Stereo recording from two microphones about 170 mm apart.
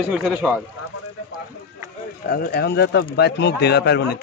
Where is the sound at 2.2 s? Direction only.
65° left (ahead or behind).